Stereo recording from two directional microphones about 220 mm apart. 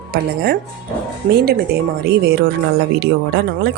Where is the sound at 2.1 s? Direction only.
45° right (ahead or behind).